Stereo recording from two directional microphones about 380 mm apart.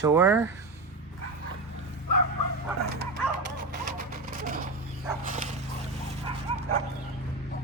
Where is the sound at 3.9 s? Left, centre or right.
Right.